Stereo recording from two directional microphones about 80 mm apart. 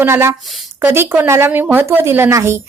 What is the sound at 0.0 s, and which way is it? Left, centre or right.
A woman's voice, right.